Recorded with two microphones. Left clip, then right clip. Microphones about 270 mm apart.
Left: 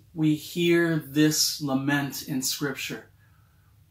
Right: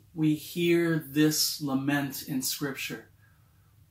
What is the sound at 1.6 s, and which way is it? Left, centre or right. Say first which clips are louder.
Speech: left 3 dB; centre.